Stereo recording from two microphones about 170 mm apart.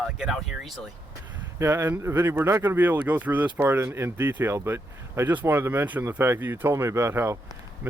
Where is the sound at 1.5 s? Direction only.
15° right (ahead or behind).